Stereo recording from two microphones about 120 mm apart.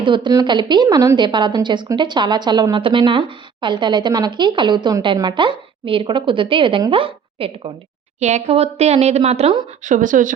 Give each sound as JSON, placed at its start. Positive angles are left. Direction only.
{"t": 0.0, "sound": "a woman's voice", "side_deg": -40}
{"t": 8.2, "sound": "a woman's voice", "side_deg": -65}
{"t": 9.8, "sound": "speech", "side_deg": -90}